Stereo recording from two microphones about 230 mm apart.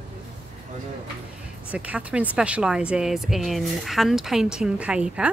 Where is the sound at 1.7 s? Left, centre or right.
Centre.